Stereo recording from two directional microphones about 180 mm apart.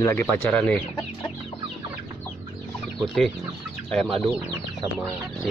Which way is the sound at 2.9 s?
Centre (ahead or behind).